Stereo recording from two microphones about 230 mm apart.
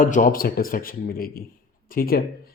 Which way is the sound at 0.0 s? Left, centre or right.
Left.